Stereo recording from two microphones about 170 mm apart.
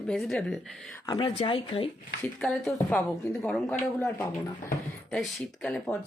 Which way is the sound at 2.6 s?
5° left (ahead or behind).